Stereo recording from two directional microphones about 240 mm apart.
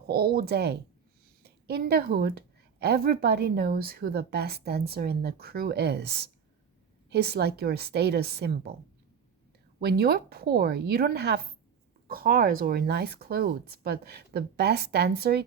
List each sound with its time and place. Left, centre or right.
0.1 s a woman's voice: right
9.8 s a woman's voice: right